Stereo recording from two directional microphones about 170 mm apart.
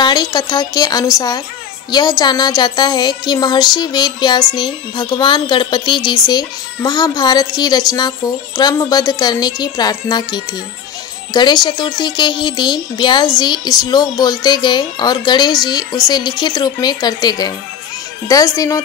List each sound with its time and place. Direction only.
0.0 s speech: 25° left (ahead or behind)